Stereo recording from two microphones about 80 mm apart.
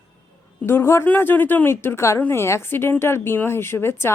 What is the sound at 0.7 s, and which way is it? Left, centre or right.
Speech, left.